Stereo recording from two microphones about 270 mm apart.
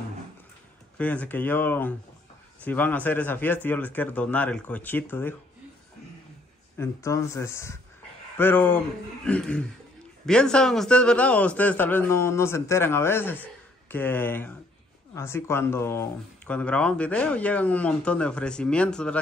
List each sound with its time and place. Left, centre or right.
0.9 s a man's voice: centre
6.8 s a man's voice: centre